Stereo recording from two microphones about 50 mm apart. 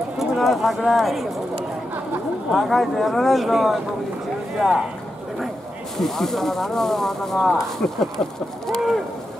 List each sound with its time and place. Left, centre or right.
0.2 s speech: centre
2.7 s speech: centre
5.9 s speech: centre
7.8 s a sound: left
8.6 s speech: centre